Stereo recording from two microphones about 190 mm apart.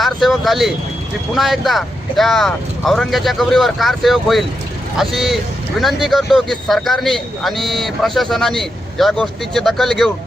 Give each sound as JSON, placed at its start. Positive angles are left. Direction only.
{"t": 0.0, "sound": "vehicle", "side_deg": 0}
{"t": 1.4, "sound": "a man's voice", "side_deg": 0}